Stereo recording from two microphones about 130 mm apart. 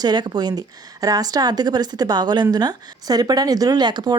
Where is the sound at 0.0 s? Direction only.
35° right (ahead or behind).